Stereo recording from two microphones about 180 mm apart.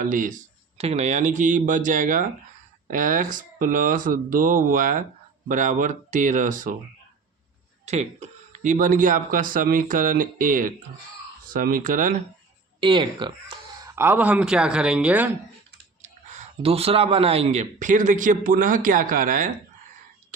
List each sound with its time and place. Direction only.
0.0 s speech: 45° right (ahead or behind)
7.9 s speech: 40° right (ahead or behind)
12.8 s speech: 25° right (ahead or behind); by 15.3 s 10° right (ahead or behind)
16.3 s speech: 35° right (ahead or behind)